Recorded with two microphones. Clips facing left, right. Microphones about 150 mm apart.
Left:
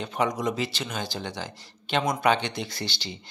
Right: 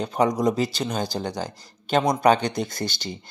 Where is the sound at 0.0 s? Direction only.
35° right (ahead or behind).